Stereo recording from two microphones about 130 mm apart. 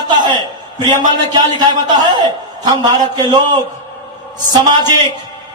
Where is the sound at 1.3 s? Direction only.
35° right (ahead or behind).